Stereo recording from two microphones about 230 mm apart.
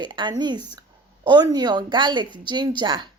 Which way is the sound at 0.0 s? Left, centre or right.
Centre.